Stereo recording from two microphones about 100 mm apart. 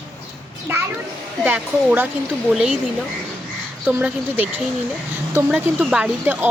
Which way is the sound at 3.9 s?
15° right (ahead or behind).